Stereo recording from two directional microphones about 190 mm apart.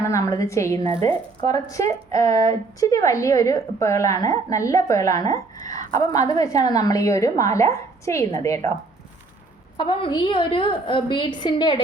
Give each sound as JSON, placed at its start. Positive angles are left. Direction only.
{"t": 0.0, "sound": "speech", "side_deg": 15}
{"t": 9.7, "sound": "a woman's voice", "side_deg": 25}